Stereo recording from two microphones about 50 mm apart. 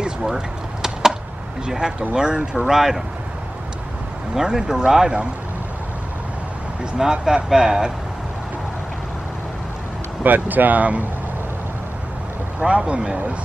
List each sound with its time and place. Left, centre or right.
0.0 s a sound: centre
1.7 s speech: centre
4.4 s speech: centre
6.8 s speech: centre
10.2 s speech: right
12.5 s speech: right